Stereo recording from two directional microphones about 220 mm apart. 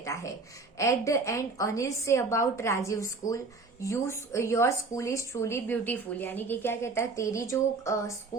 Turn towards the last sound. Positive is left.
turn(degrees=15)  # may be behind; listen again after turning